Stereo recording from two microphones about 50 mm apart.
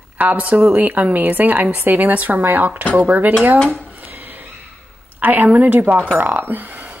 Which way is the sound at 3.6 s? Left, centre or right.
Right.